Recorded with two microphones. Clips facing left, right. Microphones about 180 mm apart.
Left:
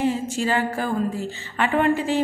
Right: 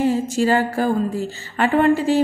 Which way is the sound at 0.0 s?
40° right (ahead or behind).